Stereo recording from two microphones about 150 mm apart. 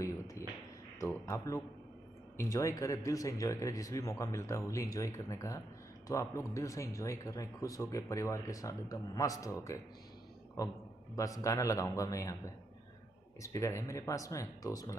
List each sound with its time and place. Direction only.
0.0 s a sound: 20° left (ahead or behind)
2.5 s speech: 20° left (ahead or behind)
11.1 s speech: 20° left (ahead or behind)